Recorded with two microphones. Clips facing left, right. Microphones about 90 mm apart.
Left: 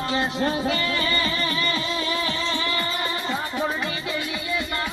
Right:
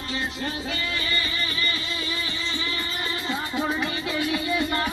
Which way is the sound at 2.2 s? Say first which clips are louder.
Left 6 dB; 90° left.